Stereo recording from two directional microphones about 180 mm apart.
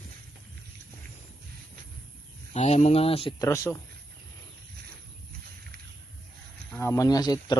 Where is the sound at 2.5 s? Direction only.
35° left (ahead or behind).